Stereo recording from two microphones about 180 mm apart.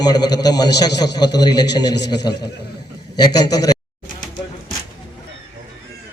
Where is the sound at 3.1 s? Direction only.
25° left (ahead or behind).